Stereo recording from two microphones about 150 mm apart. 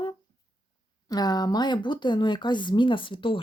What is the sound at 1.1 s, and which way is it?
Speech, 25° left (ahead or behind).